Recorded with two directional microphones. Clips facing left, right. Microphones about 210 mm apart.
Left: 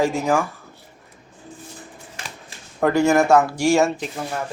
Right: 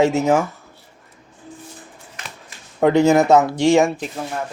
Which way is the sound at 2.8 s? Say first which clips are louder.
Right 3 dB; 20° right (ahead or behind).